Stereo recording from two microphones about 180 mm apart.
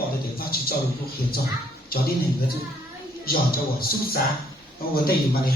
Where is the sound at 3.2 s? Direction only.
55° left (ahead or behind).